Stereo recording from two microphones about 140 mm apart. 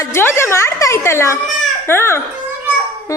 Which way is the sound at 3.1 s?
20° left (ahead or behind).